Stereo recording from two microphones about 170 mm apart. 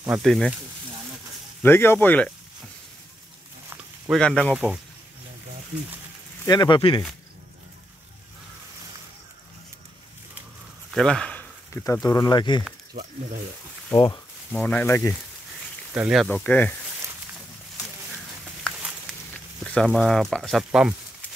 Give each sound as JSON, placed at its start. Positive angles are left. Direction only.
{"t": 0.2, "sound": "speech", "side_deg": 0}
{"t": 1.6, "sound": "speech", "side_deg": 15}
{"t": 4.1, "sound": "speech", "side_deg": 0}
{"t": 6.4, "sound": "speech", "side_deg": 25}
{"t": 10.9, "sound": "speech", "side_deg": 5}
{"t": 14.5, "sound": "speech", "side_deg": 5}
{"t": 15.9, "sound": "speech", "side_deg": -5}
{"t": 16.3, "sound": "speech", "side_deg": 5}
{"t": 18.4, "sound": "a sound", "side_deg": -5}
{"t": 19.9, "sound": "speech", "side_deg": 0}